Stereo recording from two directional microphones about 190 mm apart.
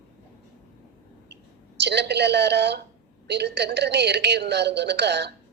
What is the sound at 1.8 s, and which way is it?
A woman's voice, 60° right (ahead or behind).